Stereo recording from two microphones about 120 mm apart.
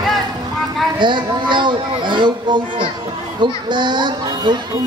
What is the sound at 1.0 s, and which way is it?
Speech, 40° right (ahead or behind).